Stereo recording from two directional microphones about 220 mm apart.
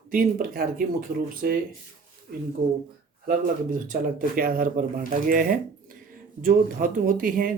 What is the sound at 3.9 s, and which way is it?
Speech, 40° right (ahead or behind).